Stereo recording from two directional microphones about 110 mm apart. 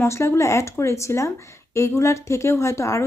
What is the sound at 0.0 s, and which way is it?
Speech, 25° left (ahead or behind).